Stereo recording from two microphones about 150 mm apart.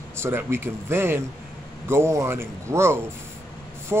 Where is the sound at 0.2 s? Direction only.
15° right (ahead or behind).